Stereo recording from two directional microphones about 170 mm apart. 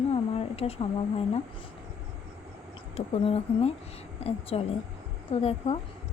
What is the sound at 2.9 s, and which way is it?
Speech, 35° left (ahead or behind).